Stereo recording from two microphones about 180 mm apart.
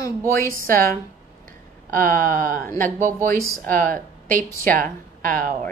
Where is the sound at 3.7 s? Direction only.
50° right (ahead or behind).